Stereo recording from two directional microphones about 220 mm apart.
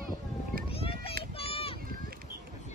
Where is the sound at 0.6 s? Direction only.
25° left (ahead or behind).